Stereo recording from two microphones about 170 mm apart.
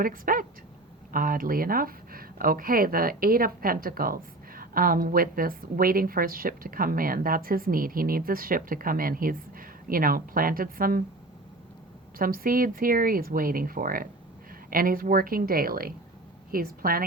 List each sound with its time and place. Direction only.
0.0 s speech: 55° right (ahead or behind)
12.2 s speech: 60° right (ahead or behind)